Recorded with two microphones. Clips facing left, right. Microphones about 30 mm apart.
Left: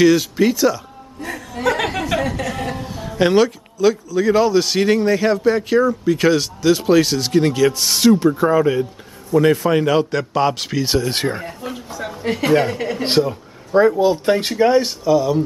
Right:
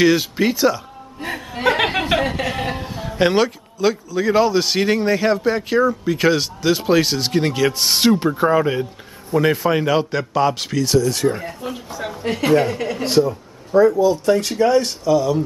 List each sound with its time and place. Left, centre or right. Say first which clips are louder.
0.0 s a man's voice: left 2 dB; centre
1.2 s chuckle: right 1 dB; right
2.9 s a man's voice: left 2 dB; centre
10.8 s speech: right 3 dB; left
11.3 s speech: even; centre
13.7 s speech: even; left
14.1 s speech: even; left
14.6 s a man's voice: left 1 dB; centre